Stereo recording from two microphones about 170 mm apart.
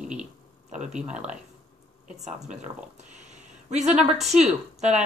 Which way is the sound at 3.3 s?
45° right (ahead or behind).